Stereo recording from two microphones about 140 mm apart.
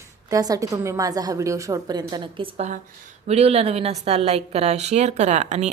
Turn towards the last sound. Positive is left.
turn(degrees=-55)  # may be behind; listen again after turning